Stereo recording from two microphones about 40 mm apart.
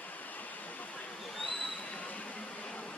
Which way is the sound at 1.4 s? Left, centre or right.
Left.